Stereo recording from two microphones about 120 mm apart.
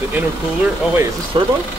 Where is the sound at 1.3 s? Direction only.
45° right (ahead or behind).